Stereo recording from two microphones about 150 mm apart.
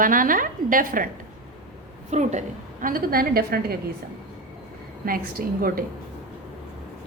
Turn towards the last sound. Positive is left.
turn(degrees=-75)  # may be behind; listen again after turning